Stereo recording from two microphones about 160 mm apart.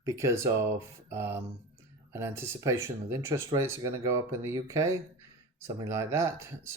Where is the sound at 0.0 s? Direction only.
20° right (ahead or behind).